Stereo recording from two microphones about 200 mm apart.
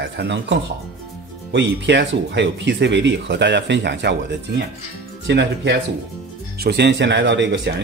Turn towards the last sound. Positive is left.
turn(degrees=-65)  # may be behind; listen again after turning